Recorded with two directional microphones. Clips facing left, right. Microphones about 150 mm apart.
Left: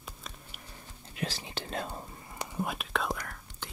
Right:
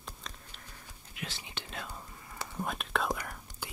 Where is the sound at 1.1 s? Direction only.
35° left (ahead or behind).